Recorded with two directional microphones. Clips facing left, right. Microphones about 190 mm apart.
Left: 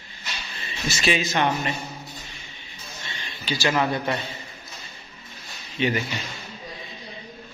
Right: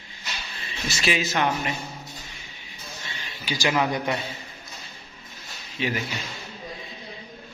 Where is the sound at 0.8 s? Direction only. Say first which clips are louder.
Left 2 dB; 5° right (ahead or behind).